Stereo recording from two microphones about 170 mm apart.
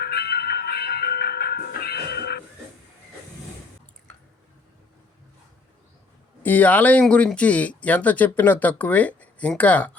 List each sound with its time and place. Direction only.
0.0 s music: 70° left (ahead or behind)
6.4 s speech: 10° left (ahead or behind)